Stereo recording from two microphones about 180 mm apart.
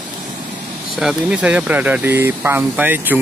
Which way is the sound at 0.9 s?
5° right (ahead or behind).